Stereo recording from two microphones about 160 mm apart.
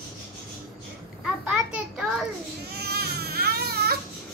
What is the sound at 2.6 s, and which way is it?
Baby cry, 90° right.